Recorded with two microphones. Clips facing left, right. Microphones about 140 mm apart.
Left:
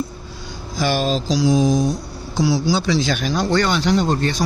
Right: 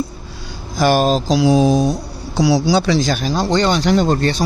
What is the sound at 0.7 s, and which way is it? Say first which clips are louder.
Speech: right 6 dB; 50° right (ahead or behind).